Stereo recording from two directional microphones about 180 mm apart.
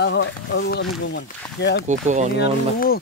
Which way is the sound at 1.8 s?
40° right (ahead or behind).